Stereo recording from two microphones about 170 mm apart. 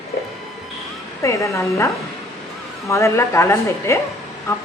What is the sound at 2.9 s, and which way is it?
A woman's voice, 15° left (ahead or behind).